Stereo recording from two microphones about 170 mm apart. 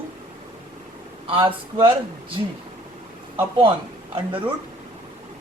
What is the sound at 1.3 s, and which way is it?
Speech, 30° right (ahead or behind).